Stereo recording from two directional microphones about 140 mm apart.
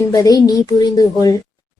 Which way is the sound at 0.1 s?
25° left (ahead or behind).